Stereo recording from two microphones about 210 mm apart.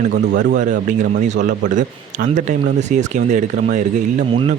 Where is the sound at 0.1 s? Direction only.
55° right (ahead or behind).